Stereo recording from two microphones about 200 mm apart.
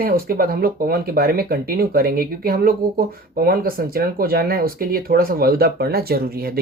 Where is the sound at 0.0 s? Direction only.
45° right (ahead or behind).